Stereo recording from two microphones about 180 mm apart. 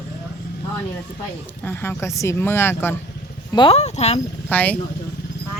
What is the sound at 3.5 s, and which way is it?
Speech, 25° left (ahead or behind).